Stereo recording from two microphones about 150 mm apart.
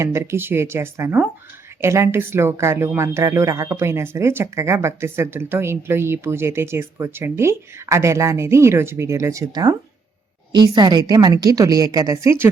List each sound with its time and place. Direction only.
0.0 s a woman's voice: 15° right (ahead or behind)